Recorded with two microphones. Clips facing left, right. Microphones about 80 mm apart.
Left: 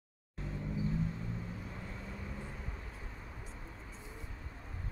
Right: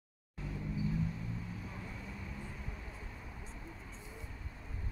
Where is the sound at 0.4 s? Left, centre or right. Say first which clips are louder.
Left 1 dB; left.